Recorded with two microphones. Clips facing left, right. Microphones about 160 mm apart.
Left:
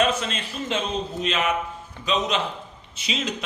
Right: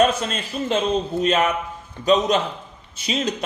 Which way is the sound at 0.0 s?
40° right (ahead or behind).